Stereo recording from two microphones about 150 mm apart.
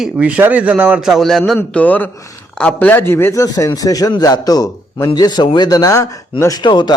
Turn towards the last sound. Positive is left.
turn(degrees=30)  # may be behind; listen again after turning